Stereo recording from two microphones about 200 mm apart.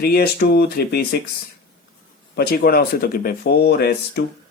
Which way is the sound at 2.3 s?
50° left (ahead or behind).